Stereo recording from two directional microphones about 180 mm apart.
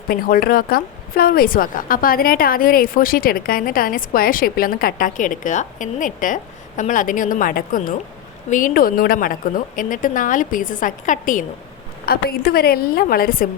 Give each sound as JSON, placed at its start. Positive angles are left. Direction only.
{"t": 0.1, "sound": "a woman's voice", "side_deg": 55}